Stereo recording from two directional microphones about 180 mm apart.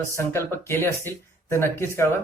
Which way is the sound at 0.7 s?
15° left (ahead or behind).